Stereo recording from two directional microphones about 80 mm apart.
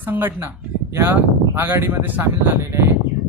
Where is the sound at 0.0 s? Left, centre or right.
Right.